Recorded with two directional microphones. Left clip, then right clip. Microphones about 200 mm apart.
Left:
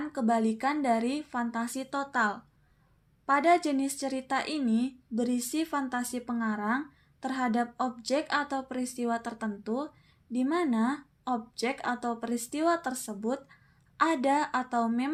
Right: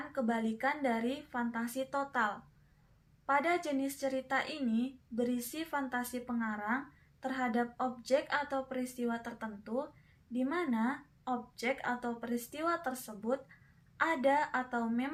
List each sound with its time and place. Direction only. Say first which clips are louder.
0.1 s speech: left 7 dB; 25° left (ahead or behind)